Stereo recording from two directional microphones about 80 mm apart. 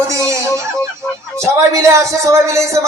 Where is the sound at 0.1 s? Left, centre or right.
Right.